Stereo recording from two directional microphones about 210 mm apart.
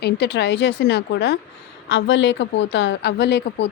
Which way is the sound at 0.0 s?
50° left (ahead or behind).